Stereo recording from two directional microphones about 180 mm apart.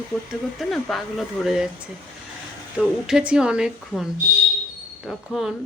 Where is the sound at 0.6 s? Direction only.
Centre (ahead or behind).